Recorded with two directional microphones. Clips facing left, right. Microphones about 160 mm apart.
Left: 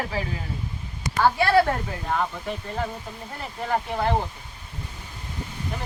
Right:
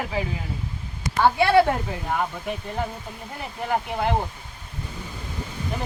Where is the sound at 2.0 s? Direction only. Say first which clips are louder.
Left 2 dB; 10° right (ahead or behind).